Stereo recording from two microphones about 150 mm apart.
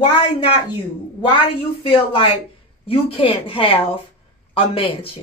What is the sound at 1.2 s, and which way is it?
A woman's voice, 40° left (ahead or behind).